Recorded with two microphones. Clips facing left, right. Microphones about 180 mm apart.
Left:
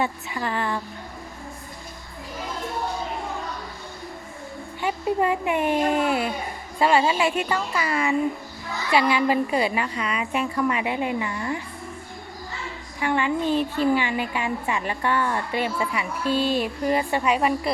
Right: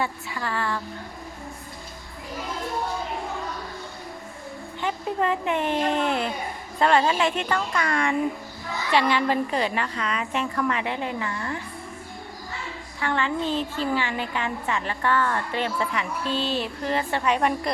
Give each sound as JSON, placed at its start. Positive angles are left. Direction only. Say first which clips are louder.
{"t": 0.0, "sound": "speech", "louder": "left 3 dB", "side_deg": 20}
{"t": 4.8, "sound": "a woman's voice", "louder": "left 3 dB", "side_deg": 10}
{"t": 13.0, "sound": "a woman's voice", "louder": "left 3 dB", "side_deg": 15}